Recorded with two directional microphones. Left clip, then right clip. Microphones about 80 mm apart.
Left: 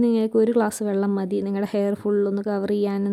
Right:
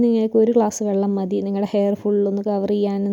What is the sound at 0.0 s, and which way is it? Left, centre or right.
A woman's voice, right.